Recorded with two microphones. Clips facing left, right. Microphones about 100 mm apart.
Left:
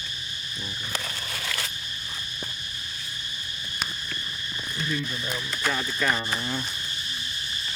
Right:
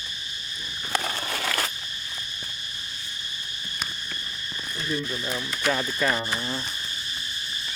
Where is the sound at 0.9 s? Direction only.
55° right (ahead or behind).